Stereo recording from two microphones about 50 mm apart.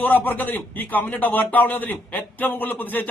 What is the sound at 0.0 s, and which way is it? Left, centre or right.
A man's voice, left.